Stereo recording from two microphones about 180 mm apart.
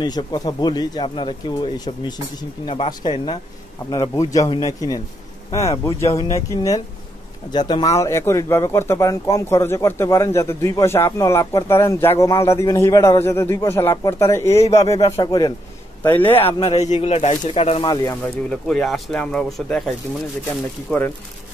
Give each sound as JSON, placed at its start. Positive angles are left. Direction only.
{"t": 0.0, "sound": "speech", "side_deg": 25}
{"t": 14.6, "sound": "speech", "side_deg": 35}
{"t": 16.0, "sound": "speech", "side_deg": 10}
{"t": 16.4, "sound": "speech", "side_deg": 30}
{"t": 16.9, "sound": "speech", "side_deg": 35}
{"t": 18.2, "sound": "speech", "side_deg": 5}